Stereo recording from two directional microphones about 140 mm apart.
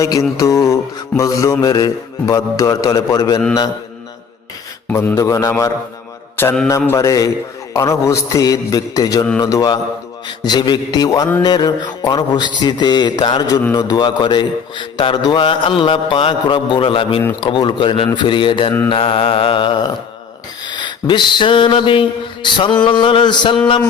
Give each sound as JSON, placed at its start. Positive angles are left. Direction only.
{"t": 0.0, "sound": "mantra", "side_deg": 25}
{"t": 4.9, "sound": "mantra", "side_deg": 20}
{"t": 11.4, "sound": "speech", "side_deg": 30}
{"t": 20.7, "sound": "a sound", "side_deg": 35}
{"t": 22.4, "sound": "speech", "side_deg": 35}